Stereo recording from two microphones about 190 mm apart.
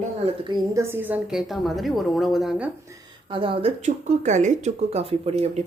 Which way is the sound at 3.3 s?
30° right (ahead or behind).